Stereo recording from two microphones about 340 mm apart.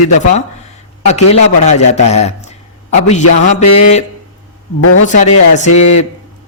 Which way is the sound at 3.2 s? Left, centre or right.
Left.